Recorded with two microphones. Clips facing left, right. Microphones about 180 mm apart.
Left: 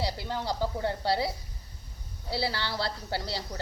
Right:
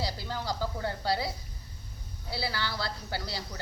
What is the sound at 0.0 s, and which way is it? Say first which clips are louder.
Speech: left 2 dB; 25° left (ahead or behind).